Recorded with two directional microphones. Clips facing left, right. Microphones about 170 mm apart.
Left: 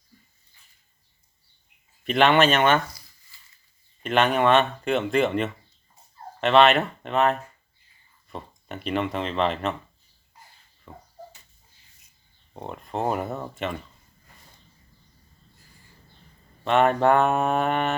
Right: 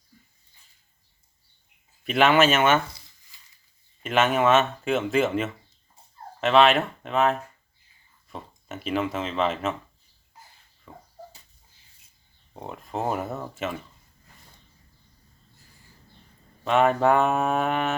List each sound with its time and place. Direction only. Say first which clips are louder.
2.0 s speech: even; 5° right (ahead or behind)
2.8 s a sound: left 1 dB; 25° right (ahead or behind)
4.0 s speech: left 1 dB; 5° right (ahead or behind)
10.9 s a sound: left 1 dB; centre (ahead or behind)
12.5 s speech: left 1 dB; centre (ahead or behind)
16.6 s speech: left 1 dB; centre (ahead or behind)